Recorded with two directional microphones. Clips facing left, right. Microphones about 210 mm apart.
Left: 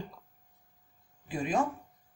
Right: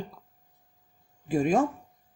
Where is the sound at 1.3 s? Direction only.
50° right (ahead or behind).